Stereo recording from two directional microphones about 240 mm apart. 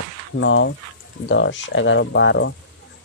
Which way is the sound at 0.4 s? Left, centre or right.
Left.